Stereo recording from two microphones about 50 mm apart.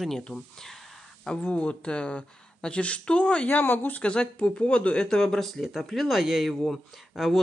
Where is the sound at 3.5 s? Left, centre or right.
Left.